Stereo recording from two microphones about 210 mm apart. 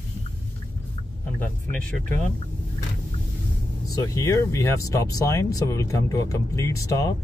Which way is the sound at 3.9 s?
15° left (ahead or behind).